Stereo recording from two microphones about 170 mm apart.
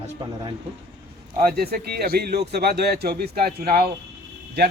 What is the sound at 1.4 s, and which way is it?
A man's voice, 65° right (ahead or behind).